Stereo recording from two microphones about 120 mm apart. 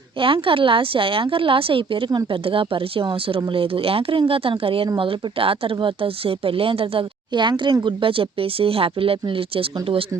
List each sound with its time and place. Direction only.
0.2 s speech: 50° right (ahead or behind)